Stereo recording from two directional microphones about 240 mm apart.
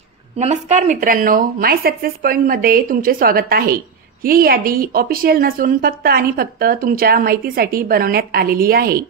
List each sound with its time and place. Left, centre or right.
0.4 s speech: right